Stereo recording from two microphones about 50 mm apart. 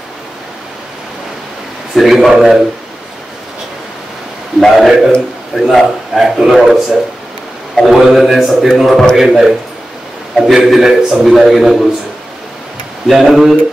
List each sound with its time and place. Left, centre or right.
2.0 s a man's voice: centre
4.7 s a man's voice: centre
13.0 s a man's voice: centre